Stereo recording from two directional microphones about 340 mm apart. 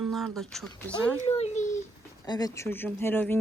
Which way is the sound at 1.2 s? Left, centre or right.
Centre.